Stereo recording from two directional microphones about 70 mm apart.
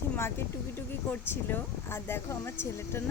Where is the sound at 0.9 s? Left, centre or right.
Left.